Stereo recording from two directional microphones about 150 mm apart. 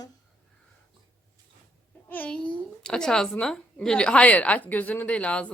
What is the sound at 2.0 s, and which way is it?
A child's voice, 10° left (ahead or behind).